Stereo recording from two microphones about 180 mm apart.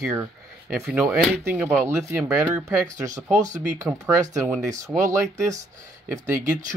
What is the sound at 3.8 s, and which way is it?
Speech, 15° right (ahead or behind).